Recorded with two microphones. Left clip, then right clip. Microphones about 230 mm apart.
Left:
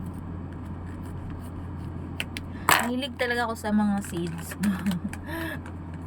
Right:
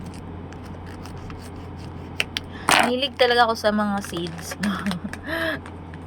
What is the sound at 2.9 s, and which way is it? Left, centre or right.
Speech, centre.